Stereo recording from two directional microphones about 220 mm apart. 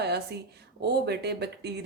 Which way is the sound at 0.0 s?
50° right (ahead or behind).